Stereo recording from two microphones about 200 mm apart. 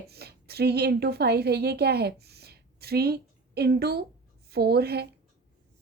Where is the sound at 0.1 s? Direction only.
55° right (ahead or behind).